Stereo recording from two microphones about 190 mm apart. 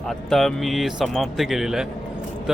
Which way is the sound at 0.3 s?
Centre (ahead or behind).